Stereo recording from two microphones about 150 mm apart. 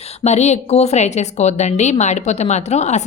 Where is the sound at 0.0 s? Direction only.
45° left (ahead or behind).